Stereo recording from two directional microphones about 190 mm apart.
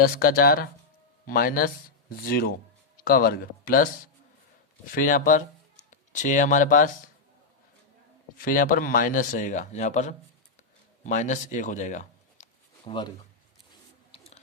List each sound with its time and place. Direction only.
0.0 s speech: 50° left (ahead or behind)
4.9 s speech: 45° left (ahead or behind)
8.4 s speech: 45° left (ahead or behind)
12.8 s speech: 25° left (ahead or behind)
14.1 s a sound: 35° left (ahead or behind)